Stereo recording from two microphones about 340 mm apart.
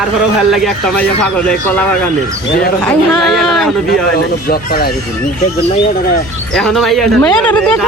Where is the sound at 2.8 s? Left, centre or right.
Centre.